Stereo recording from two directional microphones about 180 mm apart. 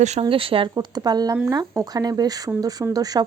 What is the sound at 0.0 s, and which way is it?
Speech, 35° right (ahead or behind).